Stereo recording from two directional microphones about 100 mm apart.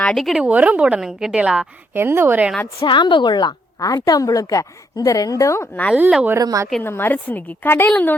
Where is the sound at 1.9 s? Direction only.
20° right (ahead or behind).